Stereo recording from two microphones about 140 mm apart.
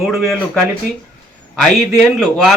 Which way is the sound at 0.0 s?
Centre (ahead or behind).